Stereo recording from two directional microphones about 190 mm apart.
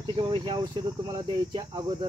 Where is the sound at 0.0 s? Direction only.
25° right (ahead or behind).